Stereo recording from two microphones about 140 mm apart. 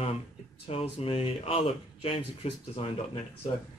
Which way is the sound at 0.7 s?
40° left (ahead or behind).